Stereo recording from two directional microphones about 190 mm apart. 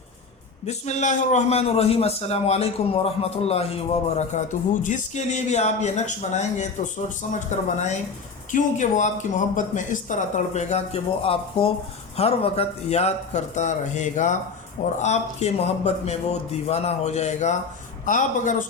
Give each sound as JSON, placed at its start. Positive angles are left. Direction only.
{"t": 0.6, "sound": "a man's voice", "side_deg": 35}